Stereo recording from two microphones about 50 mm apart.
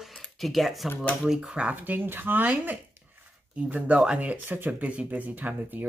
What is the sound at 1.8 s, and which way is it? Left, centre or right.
Speech, right.